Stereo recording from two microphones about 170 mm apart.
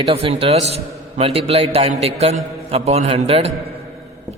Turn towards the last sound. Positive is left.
turn(degrees=-35)  # may be behind; listen again after turning